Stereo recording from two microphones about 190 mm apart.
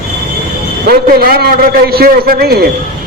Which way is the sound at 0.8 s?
55° right (ahead or behind).